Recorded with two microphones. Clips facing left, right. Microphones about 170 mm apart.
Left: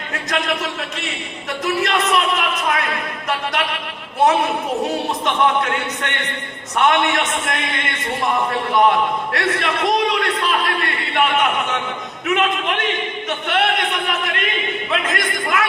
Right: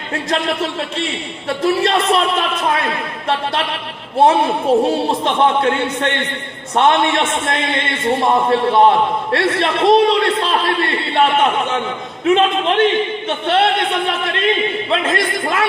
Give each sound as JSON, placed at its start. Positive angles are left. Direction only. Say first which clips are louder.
{"t": 0.1, "sound": "a man's voice", "louder": "right 3 dB", "side_deg": -30}